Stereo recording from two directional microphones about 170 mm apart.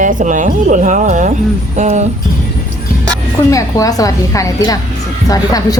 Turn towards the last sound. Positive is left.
turn(degrees=20)  # may be behind; listen again after turning